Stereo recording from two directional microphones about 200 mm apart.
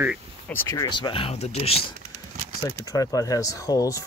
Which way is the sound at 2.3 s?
35° right (ahead or behind).